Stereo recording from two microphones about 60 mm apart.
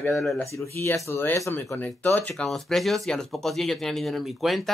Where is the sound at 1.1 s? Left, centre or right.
Left.